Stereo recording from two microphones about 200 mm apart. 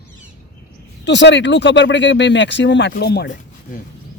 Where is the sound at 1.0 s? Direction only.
60° left (ahead or behind).